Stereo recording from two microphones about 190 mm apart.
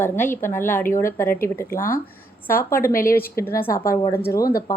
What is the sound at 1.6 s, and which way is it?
Speech, 50° left (ahead or behind).